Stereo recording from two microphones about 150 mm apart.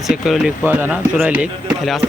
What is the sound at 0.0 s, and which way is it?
Speech, centre (ahead or behind).